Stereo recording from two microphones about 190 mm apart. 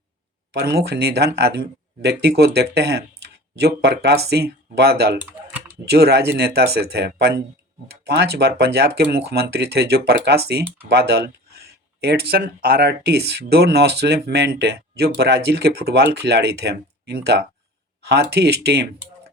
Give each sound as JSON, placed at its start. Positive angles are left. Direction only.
{"t": 0.8, "sound": "speech", "side_deg": -55}
{"t": 5.2, "sound": "typing", "side_deg": -5}
{"t": 5.8, "sound": "speech", "side_deg": -60}